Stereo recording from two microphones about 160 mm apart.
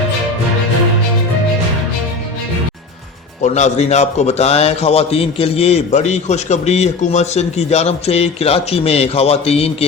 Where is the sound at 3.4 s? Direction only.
45° left (ahead or behind).